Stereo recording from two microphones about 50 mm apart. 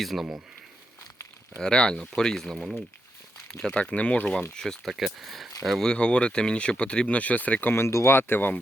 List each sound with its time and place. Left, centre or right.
0.0 s speech: centre
1.5 s speech: centre
2.6 s speech: centre
3.9 s speech: left
4.5 s speech: centre
4.9 s speech: centre
5.8 s speech: centre
7.2 s speech: left
7.7 s speech: left